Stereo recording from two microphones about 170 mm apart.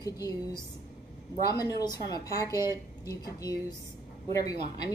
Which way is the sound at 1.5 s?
20° left (ahead or behind).